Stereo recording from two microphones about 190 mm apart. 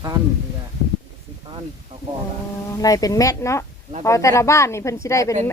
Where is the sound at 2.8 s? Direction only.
20° left (ahead or behind).